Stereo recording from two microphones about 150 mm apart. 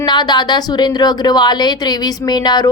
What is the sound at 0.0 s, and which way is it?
A woman's voice, 30° left (ahead or behind).